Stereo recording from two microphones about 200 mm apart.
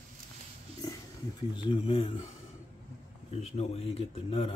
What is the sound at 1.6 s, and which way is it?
Speech, 25° left (ahead or behind).